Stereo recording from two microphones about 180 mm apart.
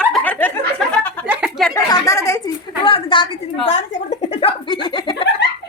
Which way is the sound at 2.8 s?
30° left (ahead or behind).